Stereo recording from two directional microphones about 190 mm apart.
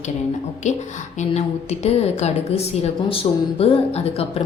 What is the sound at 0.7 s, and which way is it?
A woman's voice, 35° left (ahead or behind).